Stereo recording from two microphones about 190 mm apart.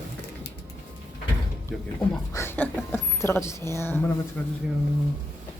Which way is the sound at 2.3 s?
15° left (ahead or behind).